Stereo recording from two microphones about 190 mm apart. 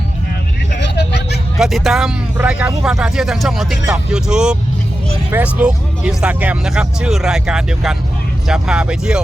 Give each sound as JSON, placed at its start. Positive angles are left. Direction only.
{"t": 0.8, "sound": "vehicle", "side_deg": 65}
{"t": 1.5, "sound": "speech", "side_deg": 0}